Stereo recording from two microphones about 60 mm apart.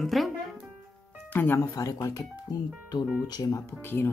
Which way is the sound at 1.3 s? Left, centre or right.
Left.